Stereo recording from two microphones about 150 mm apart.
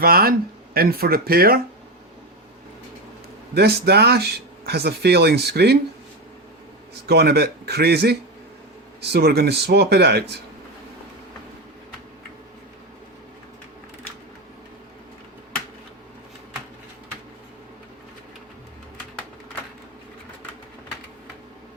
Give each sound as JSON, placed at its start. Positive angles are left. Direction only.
{"t": 0.0, "sound": "speech", "side_deg": -90}
{"t": 3.5, "sound": "speech", "side_deg": -90}
{"t": 7.1, "sound": "speech", "side_deg": -90}